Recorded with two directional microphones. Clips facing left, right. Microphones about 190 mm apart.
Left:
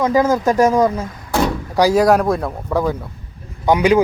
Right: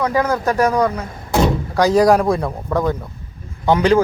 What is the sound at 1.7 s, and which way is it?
A man's voice, 10° left (ahead or behind).